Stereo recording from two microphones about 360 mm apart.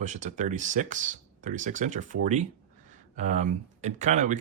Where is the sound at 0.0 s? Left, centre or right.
Centre.